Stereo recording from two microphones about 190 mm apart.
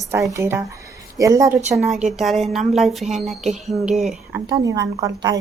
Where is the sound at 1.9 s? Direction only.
Centre (ahead or behind).